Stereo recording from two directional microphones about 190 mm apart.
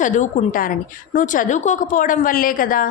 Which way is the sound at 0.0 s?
40° left (ahead or behind).